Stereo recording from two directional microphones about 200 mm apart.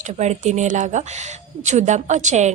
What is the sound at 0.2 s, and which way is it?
A woman's voice, 35° right (ahead or behind).